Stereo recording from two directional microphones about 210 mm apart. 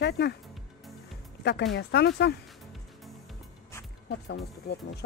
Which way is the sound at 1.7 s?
55° left (ahead or behind).